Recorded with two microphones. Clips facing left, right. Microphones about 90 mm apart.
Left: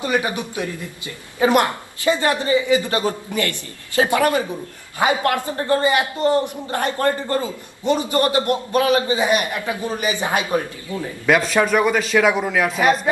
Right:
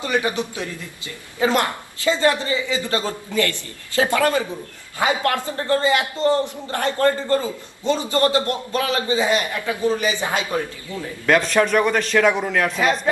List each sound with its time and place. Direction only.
0.0 s speech: 20° left (ahead or behind)
11.3 s a man's voice: 5° left (ahead or behind)